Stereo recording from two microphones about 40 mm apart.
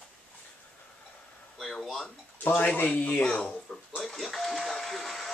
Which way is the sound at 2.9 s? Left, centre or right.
Left.